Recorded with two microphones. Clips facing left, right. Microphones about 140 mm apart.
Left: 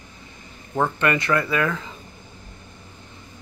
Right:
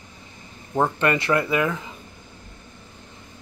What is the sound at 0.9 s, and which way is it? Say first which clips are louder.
Speech: even; 25° right (ahead or behind).